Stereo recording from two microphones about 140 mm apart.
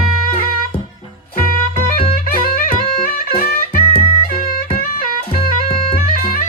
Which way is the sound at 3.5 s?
90° left.